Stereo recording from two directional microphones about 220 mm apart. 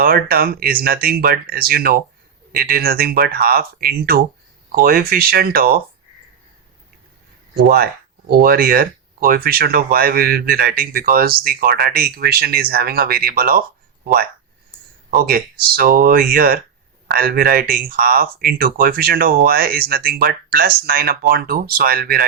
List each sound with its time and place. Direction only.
0.0 s speech: 40° right (ahead or behind)
8.3 s speech: 40° right (ahead or behind)